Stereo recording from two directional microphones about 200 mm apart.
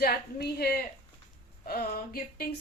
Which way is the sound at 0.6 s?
50° left (ahead or behind).